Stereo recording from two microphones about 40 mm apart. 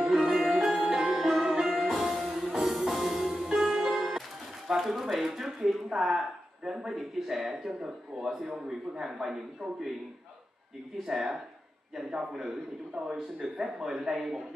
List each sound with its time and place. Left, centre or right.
0.0 s music: right
0.4 s music: centre
4.6 s speech: centre
11.1 s speech: centre